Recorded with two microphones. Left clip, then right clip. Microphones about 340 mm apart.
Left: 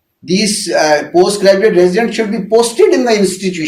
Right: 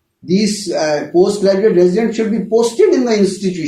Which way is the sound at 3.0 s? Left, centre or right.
Left.